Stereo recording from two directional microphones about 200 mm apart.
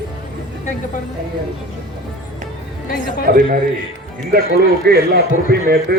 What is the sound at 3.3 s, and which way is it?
A man's voice, 45° right (ahead or behind).